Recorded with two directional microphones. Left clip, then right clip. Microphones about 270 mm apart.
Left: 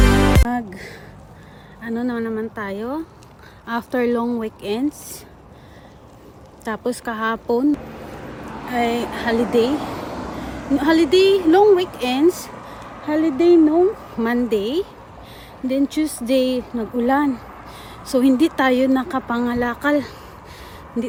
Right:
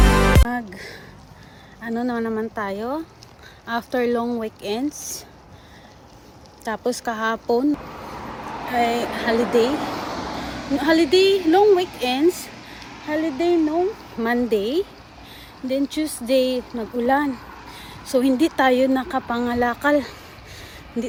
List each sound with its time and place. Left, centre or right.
0.3 s music: centre
1.8 s speech: centre
6.7 s speech: centre
8.4 s vehicle: right
8.7 s speech: centre
9.3 s speech: right
10.8 s speech: centre